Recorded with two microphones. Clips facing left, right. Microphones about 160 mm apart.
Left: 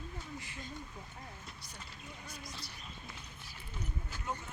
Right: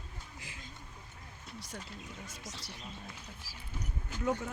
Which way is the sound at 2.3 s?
90° right.